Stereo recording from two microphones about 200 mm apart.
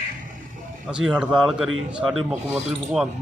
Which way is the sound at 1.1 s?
5° right (ahead or behind).